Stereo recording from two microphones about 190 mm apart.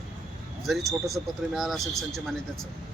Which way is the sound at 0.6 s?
Centre (ahead or behind).